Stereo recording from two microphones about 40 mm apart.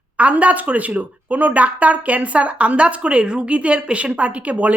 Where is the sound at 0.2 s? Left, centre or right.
Right.